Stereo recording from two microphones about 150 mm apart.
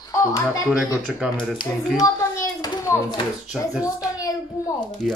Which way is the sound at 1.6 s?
25° left (ahead or behind).